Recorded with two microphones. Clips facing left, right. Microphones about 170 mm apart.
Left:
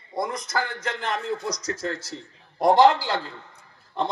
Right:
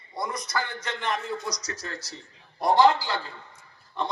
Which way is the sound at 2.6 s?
90° left.